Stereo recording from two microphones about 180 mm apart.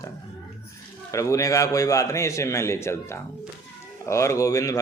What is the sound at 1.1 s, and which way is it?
A man's voice, 15° left (ahead or behind).